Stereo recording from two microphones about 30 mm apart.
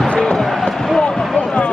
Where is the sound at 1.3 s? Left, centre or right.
Left.